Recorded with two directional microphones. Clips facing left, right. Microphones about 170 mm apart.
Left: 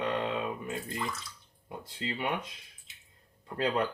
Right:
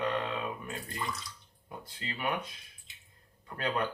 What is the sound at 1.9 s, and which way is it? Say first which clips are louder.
Speech: left 3 dB; 25° left (ahead or behind).